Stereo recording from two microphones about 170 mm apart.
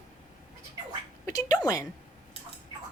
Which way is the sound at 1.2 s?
20° left (ahead or behind).